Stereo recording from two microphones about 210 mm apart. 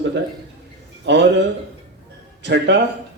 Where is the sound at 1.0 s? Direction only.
55° right (ahead or behind).